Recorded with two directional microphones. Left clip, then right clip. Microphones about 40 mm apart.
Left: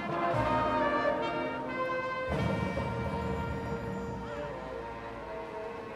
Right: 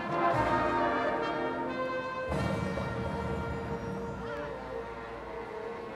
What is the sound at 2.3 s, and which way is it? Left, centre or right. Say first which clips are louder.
Music: even; centre.